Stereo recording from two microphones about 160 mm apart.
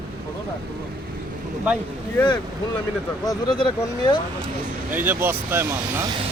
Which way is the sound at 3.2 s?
30° left (ahead or behind).